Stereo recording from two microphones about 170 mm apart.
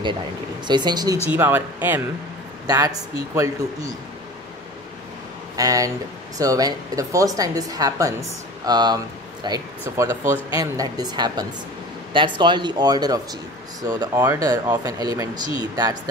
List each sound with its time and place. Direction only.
0.7 s a woman's voice: 25° right (ahead or behind)
1.3 s speech: 10° right (ahead or behind)
5.6 s a woman's voice: 20° right (ahead or behind)